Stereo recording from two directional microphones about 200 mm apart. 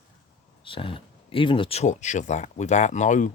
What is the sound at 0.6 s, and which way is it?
Speech, 25° left (ahead or behind).